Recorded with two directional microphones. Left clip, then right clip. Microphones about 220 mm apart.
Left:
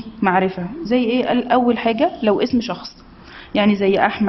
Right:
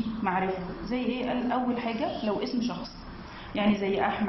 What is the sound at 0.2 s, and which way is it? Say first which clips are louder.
A woman's voice: left 12 dB; 45° left (ahead or behind).